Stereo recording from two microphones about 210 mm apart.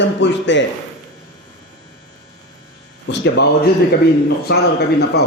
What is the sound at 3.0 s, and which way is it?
Speech, 55° left (ahead or behind).